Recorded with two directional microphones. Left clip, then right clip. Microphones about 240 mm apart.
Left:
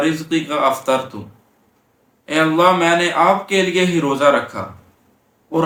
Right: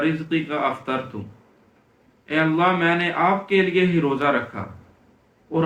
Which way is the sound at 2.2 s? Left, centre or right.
Centre.